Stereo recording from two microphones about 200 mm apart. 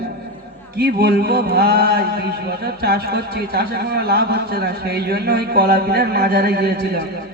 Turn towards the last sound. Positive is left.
turn(degrees=-50)  # may be behind; listen again after turning